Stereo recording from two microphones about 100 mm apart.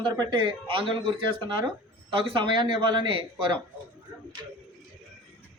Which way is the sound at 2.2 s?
55° right (ahead or behind).